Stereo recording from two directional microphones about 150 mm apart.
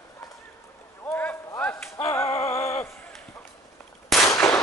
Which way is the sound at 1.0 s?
15° left (ahead or behind).